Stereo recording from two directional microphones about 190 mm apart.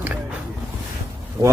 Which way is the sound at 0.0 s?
10° right (ahead or behind).